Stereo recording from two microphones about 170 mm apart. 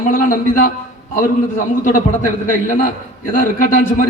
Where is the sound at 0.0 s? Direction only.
55° left (ahead or behind).